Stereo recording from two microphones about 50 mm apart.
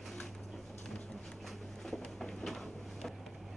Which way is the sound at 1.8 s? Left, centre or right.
Centre.